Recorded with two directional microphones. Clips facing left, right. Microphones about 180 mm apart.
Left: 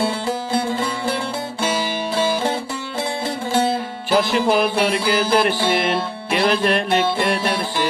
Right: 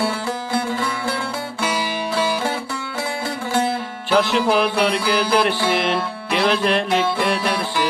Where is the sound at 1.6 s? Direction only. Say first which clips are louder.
Left 1 dB; 30° left (ahead or behind).